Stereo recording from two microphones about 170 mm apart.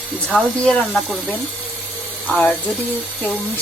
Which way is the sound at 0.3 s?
5° left (ahead or behind).